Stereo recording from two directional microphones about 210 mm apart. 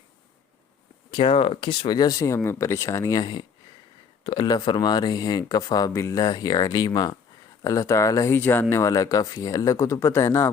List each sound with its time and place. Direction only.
1.1 s speech: 25° left (ahead or behind)